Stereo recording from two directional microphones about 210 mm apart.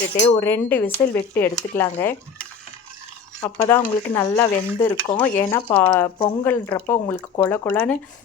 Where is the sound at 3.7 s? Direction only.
10° left (ahead or behind).